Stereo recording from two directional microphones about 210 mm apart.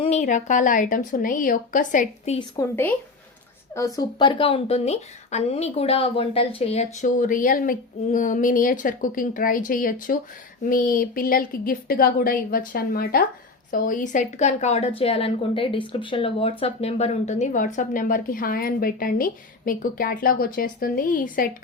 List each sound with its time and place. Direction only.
0.0 s speech: 35° left (ahead or behind)
2.6 s a woman's voice: 10° left (ahead or behind); by 21.5 s 40° left (ahead or behind)